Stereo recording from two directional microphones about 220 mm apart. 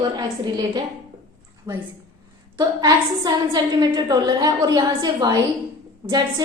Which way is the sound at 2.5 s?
15° right (ahead or behind).